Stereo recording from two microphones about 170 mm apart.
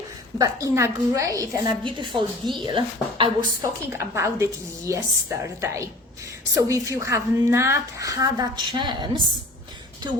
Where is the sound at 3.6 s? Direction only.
15° right (ahead or behind).